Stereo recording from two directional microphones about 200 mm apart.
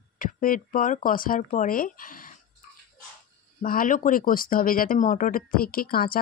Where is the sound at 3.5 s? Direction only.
45° left (ahead or behind).